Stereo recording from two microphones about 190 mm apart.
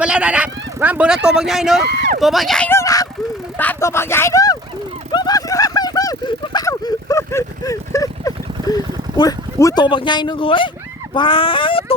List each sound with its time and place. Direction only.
0.0 s speech: 5° right (ahead or behind)
1.9 s speech: 65° right (ahead or behind)
2.2 s speech: centre (ahead or behind); by 4.5 s 15° left (ahead or behind)
5.1 s vehicle: 20° left (ahead or behind)
8.7 s speech: 20° left (ahead or behind)